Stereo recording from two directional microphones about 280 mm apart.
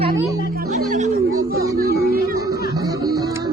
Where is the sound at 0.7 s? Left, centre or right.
Right.